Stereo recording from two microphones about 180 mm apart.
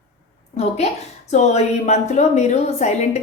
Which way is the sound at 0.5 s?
35° left (ahead or behind).